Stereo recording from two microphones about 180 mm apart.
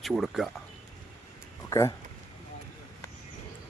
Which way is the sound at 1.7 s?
20° left (ahead or behind).